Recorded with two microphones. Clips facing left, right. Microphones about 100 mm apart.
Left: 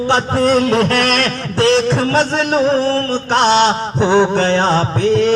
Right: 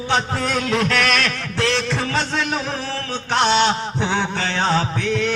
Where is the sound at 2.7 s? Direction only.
70° left (ahead or behind).